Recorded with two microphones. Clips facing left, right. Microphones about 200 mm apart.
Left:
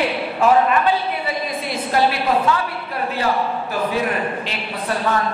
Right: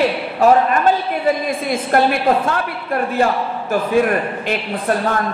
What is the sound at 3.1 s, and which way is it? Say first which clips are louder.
A man's voice: right 1 dB; 50° right (ahead or behind).